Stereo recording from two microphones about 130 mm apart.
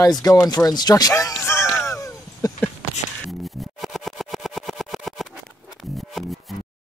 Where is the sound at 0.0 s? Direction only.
25° left (ahead or behind).